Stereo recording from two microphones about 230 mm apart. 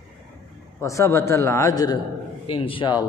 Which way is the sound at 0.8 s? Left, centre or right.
Centre.